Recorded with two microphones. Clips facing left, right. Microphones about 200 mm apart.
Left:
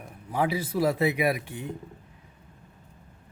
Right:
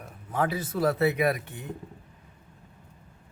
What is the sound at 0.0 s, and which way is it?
Speech, 10° left (ahead or behind).